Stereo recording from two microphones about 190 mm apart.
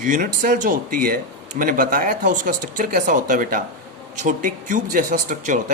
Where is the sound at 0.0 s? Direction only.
45° right (ahead or behind).